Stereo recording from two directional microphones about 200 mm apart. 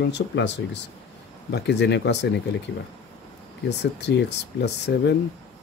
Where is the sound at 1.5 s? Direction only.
60° left (ahead or behind).